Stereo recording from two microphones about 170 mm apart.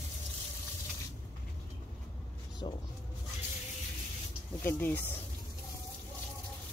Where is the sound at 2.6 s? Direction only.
25° left (ahead or behind).